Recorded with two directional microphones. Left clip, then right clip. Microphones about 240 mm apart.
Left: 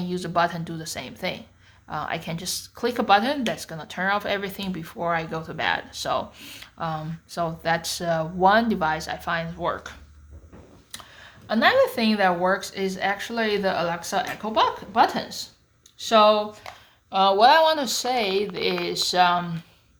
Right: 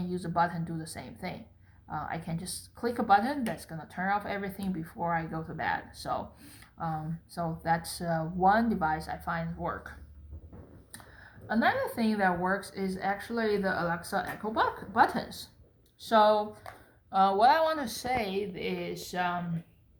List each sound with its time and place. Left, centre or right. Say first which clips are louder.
0.1 s speech: left 6 dB; left
11.4 s a woman's voice: left 9 dB; left